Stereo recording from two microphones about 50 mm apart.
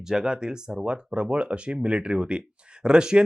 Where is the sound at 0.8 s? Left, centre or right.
Right.